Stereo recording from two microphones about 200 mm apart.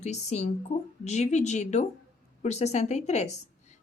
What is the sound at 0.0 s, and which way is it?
A woman's voice, 35° left (ahead or behind).